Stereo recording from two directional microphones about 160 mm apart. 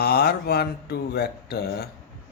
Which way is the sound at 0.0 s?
80° left.